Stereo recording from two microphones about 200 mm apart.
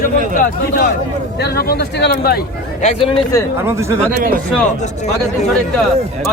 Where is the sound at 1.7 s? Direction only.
50° left (ahead or behind).